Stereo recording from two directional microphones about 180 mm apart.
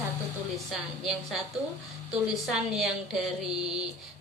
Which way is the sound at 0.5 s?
Centre (ahead or behind).